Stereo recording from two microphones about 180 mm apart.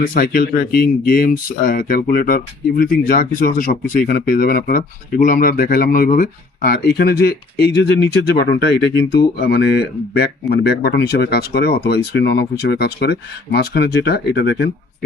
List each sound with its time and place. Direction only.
0.0 s speech: 50° left (ahead or behind); by 14.7 s 70° left (ahead or behind)